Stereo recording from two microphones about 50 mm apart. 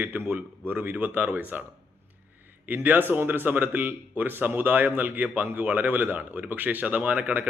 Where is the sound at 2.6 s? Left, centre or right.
Right.